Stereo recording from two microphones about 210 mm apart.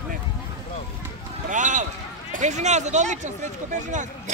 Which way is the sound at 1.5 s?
35° right (ahead or behind).